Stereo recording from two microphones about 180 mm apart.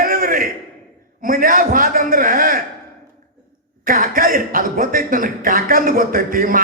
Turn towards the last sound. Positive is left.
turn(degrees=-50)  # may be behind; listen again after turning